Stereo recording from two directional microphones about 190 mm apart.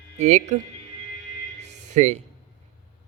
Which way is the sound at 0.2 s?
35° right (ahead or behind).